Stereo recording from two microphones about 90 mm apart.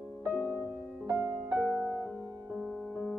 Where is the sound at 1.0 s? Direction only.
45° right (ahead or behind).